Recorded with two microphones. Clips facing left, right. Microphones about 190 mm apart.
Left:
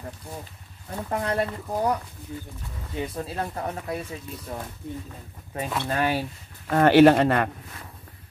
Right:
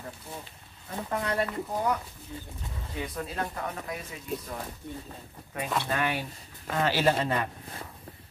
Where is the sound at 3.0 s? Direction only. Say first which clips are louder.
Left 3 dB; 30° left (ahead or behind).